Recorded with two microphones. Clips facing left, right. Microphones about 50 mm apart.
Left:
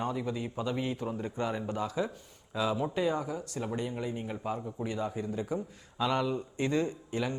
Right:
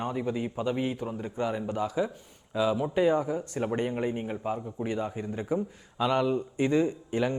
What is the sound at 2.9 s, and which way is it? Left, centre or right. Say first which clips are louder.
A man's voice: right 6 dB; right.